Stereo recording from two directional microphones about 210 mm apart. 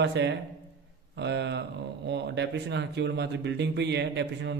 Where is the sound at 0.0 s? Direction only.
55° right (ahead or behind).